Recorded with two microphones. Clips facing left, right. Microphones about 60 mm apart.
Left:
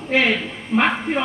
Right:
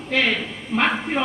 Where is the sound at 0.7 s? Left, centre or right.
Centre.